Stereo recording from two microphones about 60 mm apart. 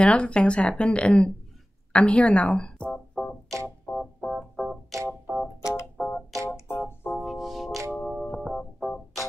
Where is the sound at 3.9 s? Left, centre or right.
Left.